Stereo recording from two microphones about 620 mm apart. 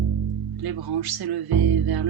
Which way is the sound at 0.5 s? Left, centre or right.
Right.